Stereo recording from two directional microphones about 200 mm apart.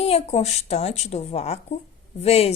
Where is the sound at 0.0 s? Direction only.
30° left (ahead or behind).